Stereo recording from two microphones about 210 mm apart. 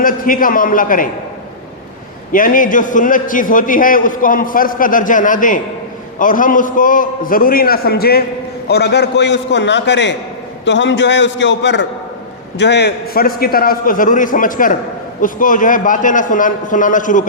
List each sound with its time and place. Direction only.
0.0 s a man's voice: 40° left (ahead or behind)
2.3 s a man's voice: 40° left (ahead or behind)